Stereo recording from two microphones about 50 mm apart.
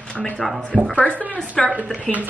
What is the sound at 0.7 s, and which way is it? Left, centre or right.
Speech, left.